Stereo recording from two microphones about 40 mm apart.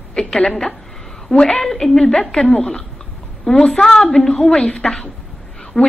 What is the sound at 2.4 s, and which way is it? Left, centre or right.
Speech, left.